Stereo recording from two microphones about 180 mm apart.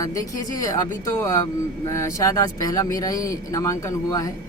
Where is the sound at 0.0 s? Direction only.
20° left (ahead or behind).